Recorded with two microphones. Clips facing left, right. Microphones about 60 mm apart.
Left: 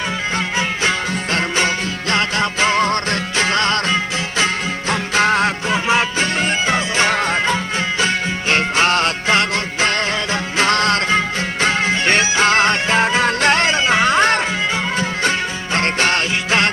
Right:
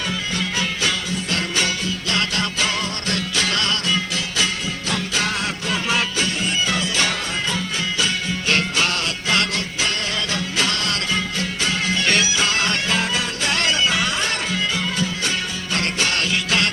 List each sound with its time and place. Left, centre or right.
0.9 s music: left
13.2 s music: left
13.6 s music: left
15.7 s music: left